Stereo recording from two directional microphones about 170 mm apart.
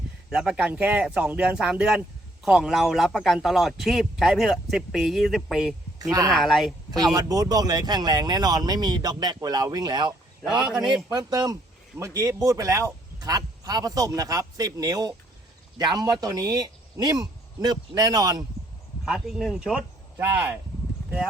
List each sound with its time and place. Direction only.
0.3 s a man's voice: 5° right (ahead or behind)
6.0 s speech: 20° right (ahead or behind)
6.3 s a man's voice: centre (ahead or behind)
6.9 s speech: 20° right (ahead or behind)
11.1 s speech: 25° right (ahead or behind)
19.0 s speech: centre (ahead or behind)